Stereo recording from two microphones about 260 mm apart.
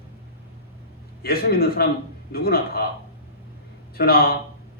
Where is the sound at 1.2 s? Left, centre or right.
Left.